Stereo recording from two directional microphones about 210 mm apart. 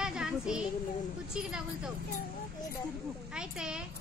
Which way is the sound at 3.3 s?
5° right (ahead or behind).